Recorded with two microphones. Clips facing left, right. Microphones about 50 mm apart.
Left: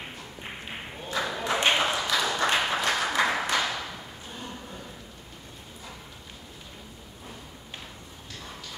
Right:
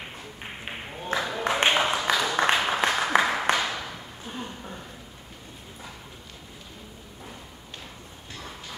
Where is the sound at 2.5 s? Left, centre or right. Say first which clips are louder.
Right 1 dB; centre.